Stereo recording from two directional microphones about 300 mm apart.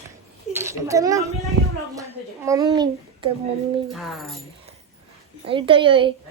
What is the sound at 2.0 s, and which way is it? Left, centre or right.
A woman's voice, centre.